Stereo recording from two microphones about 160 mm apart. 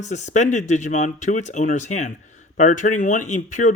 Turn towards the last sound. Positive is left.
turn(degrees=50)  # may be behind; listen again after turning